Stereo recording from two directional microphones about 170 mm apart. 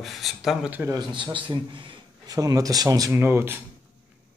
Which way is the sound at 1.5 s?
30° right (ahead or behind).